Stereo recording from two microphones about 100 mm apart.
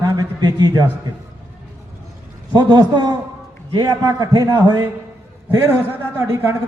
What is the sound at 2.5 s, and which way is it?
A man's voice, 45° right (ahead or behind).